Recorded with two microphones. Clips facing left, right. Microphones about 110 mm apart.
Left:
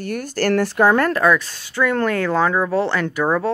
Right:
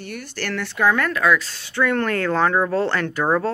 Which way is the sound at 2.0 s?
5° left (ahead or behind).